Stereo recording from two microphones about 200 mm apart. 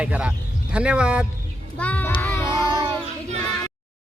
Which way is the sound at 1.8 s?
10° left (ahead or behind).